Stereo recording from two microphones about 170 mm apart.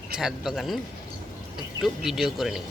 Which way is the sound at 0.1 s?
5° right (ahead or behind).